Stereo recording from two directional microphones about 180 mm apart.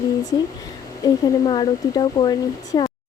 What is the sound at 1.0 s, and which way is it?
Speech, 25° left (ahead or behind).